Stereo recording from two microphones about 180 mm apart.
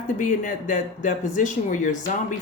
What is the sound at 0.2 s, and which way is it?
Speech, 45° left (ahead or behind).